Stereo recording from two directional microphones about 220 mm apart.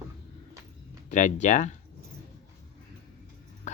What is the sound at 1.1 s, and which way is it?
Speech, 35° left (ahead or behind).